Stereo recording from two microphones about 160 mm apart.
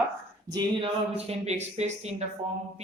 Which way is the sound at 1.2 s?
45° right (ahead or behind).